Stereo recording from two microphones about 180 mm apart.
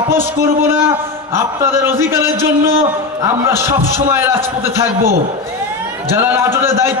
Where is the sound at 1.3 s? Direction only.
15° right (ahead or behind).